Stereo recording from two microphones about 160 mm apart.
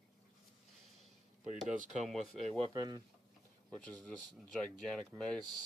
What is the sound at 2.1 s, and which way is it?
Speech, centre (ahead or behind).